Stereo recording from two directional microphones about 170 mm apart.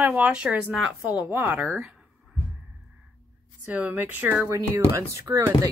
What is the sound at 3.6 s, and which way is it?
Speech, 10° right (ahead or behind).